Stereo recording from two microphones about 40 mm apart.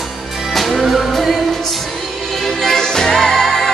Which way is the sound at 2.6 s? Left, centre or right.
Centre.